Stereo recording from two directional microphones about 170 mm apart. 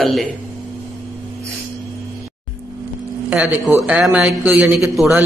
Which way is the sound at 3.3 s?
10° right (ahead or behind).